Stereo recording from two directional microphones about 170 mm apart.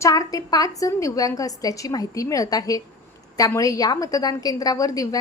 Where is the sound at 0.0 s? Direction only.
20° left (ahead or behind).